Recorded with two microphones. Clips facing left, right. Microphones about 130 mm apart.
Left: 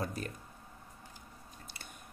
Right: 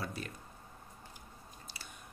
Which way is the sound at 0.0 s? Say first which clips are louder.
Left 3 dB; 45° left (ahead or behind).